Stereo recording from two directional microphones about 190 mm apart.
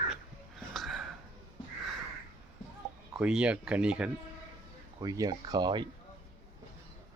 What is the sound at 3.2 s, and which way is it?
Speech, 5° right (ahead or behind).